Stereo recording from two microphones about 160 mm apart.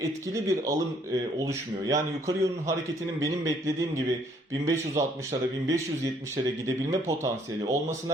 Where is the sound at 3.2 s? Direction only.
20° right (ahead or behind).